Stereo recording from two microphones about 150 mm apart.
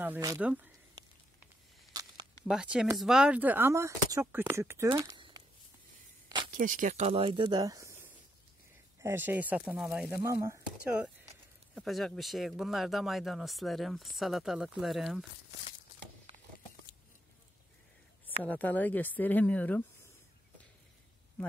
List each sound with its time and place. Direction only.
0.4 s speech: 10° right (ahead or behind)
2.4 s speech: 5° right (ahead or behind); by 5.2 s 20° right (ahead or behind)
6.2 s a sound: 30° right (ahead or behind)
6.5 s speech: 60° right (ahead or behind)
7.1 s speech: 40° right (ahead or behind)
9.0 s speech: 15° right (ahead or behind)
10.2 s speech: 20° right (ahead or behind)
10.8 s speech: 10° right (ahead or behind)
18.2 s a woman's voice: 10° left (ahead or behind)